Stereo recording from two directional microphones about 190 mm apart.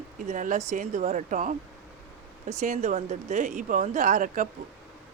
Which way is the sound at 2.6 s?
40° right (ahead or behind).